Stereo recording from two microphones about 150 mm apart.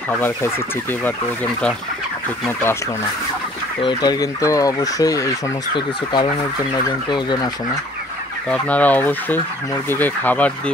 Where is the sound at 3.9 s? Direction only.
25° left (ahead or behind).